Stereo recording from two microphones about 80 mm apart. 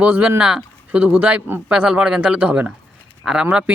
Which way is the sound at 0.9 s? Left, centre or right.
Right.